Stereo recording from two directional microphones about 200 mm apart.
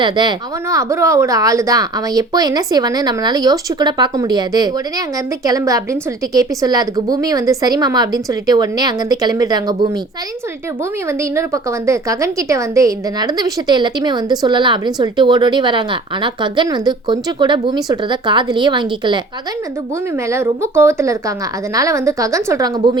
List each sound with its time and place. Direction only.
0.0 s speech: 20° right (ahead or behind)
11.1 s speech: 15° right (ahead or behind)
20.1 s a woman's voice: 15° right (ahead or behind)